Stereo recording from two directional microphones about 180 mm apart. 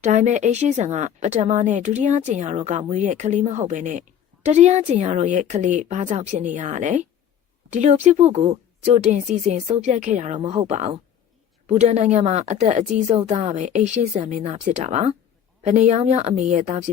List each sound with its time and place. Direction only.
0.0 s speech: 40° right (ahead or behind)